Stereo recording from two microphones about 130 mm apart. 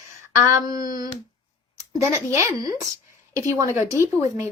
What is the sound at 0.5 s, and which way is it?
Speech, 30° right (ahead or behind).